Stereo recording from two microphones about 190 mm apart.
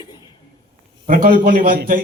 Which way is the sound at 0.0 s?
20° left (ahead or behind).